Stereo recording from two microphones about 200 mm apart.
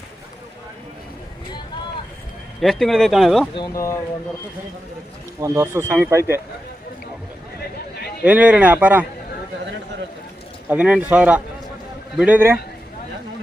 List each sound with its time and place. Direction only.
2.6 s speech: centre (ahead or behind)
3.5 s speech: 20° left (ahead or behind)
5.4 s speech: 15° right (ahead or behind)
8.2 s speech: 5° right (ahead or behind)
10.7 s speech: 5° right (ahead or behind)